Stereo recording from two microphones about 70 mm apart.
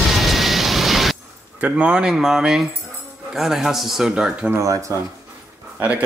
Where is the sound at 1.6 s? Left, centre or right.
Centre.